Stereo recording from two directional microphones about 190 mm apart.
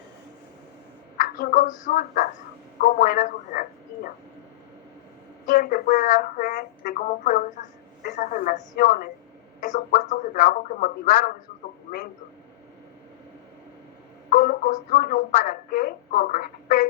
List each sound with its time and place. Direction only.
1.1 s a woman's voice: 45° left (ahead or behind)
5.5 s speech: 45° left (ahead or behind)
14.3 s speech: 45° left (ahead or behind)